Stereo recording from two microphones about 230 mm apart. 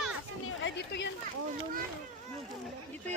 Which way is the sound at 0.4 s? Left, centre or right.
Left.